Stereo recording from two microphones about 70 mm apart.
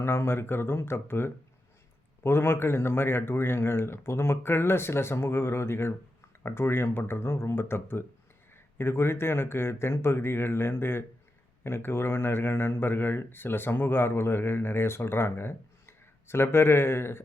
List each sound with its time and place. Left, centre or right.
0.0 s a man's voice: left